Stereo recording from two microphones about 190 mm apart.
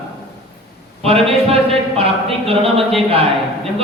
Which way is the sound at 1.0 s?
30° right (ahead or behind).